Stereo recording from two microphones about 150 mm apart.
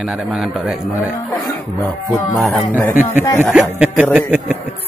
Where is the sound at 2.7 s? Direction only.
15° left (ahead or behind).